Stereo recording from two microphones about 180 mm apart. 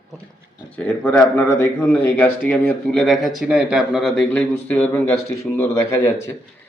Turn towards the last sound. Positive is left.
turn(degrees=15)  # may be behind; listen again after turning